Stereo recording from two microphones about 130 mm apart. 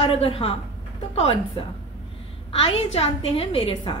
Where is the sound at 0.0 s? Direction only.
50° left (ahead or behind).